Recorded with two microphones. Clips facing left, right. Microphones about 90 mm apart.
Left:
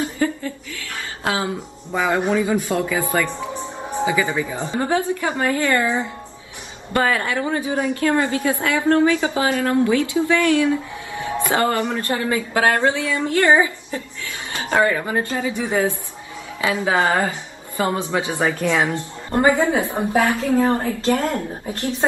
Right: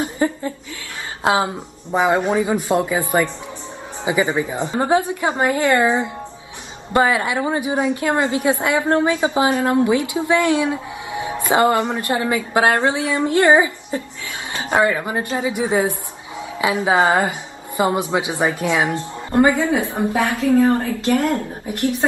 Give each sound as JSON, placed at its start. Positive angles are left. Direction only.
{"t": 0.0, "sound": "a sound", "side_deg": -25}
{"t": 1.2, "sound": "a woman's voice", "side_deg": -20}
{"t": 19.4, "sound": "a woman's voice", "side_deg": 25}